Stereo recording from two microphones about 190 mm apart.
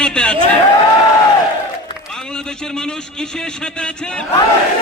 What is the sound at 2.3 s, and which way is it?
A man's voice, 5° left (ahead or behind).